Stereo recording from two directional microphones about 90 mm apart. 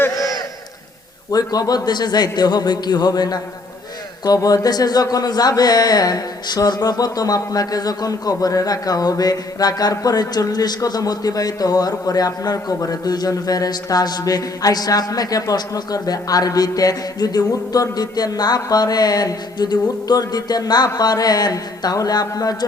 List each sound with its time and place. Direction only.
1.3 s a man's voice: 45° left (ahead or behind)